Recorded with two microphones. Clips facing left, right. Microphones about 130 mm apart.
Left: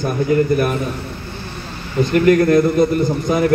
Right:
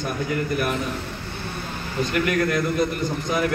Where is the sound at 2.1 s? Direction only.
40° left (ahead or behind).